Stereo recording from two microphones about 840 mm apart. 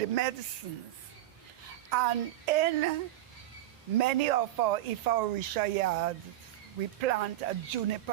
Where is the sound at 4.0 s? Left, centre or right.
Right.